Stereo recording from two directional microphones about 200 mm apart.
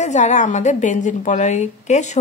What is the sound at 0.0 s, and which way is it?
A woman's voice, 35° left (ahead or behind).